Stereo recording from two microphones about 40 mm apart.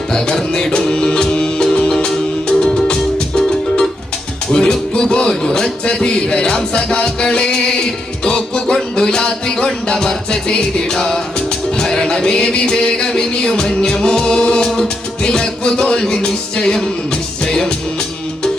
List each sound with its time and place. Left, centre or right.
0.1 s music: centre